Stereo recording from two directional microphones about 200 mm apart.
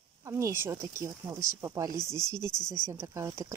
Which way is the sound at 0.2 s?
15° right (ahead or behind).